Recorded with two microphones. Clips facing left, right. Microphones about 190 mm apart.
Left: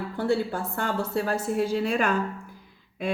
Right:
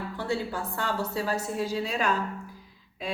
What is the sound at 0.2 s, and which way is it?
A woman's voice, 50° left (ahead or behind).